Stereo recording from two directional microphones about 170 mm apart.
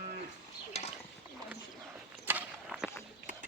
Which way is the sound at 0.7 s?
40° left (ahead or behind).